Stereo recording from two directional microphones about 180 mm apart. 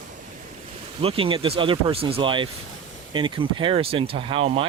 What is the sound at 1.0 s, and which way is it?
Speech, 30° right (ahead or behind).